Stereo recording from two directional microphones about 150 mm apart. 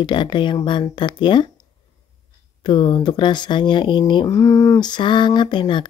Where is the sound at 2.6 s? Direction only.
35° left (ahead or behind).